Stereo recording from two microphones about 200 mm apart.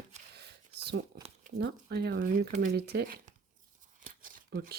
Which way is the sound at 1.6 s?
55° right (ahead or behind).